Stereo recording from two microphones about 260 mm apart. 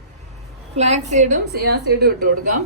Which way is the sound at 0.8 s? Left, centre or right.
Right.